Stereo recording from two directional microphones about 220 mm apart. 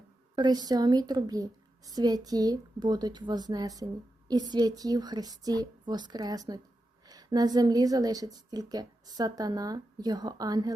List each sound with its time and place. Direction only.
0.3 s a woman's voice: 20° right (ahead or behind)